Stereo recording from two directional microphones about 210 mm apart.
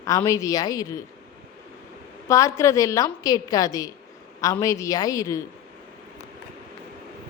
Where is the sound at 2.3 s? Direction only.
15° left (ahead or behind).